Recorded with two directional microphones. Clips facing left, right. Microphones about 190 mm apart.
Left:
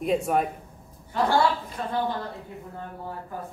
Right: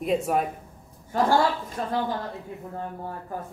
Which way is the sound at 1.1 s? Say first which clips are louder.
Right 2 dB; 45° right (ahead or behind).